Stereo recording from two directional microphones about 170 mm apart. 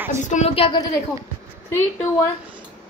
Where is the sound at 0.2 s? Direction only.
45° left (ahead or behind).